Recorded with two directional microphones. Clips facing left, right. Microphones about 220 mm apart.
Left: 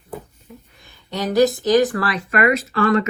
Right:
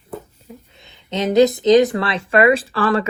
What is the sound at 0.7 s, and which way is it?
Speech, 20° right (ahead or behind).